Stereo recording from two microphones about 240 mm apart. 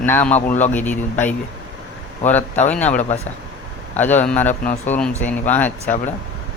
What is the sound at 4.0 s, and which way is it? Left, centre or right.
Speech, centre.